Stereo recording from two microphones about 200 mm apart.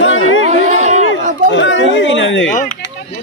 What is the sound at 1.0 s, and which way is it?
Chatter, 65° left (ahead or behind).